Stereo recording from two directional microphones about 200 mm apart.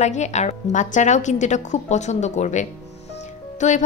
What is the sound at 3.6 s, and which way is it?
Music, 35° left (ahead or behind).